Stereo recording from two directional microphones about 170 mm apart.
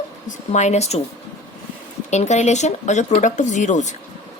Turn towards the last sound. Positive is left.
turn(degrees=45)  # may be behind; listen again after turning